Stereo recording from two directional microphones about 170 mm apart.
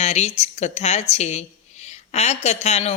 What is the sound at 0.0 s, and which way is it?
Speech, 40° left (ahead or behind).